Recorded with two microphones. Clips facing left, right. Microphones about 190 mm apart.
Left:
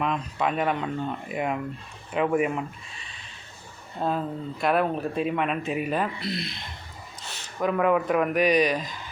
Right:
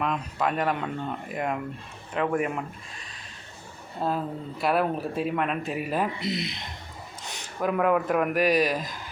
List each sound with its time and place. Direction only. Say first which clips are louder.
0.0 s speech: left 1 dB; centre (ahead or behind)
6.1 s speech: right 2 dB; 20° right (ahead or behind)
7.6 s speech: left 1 dB; centre (ahead or behind)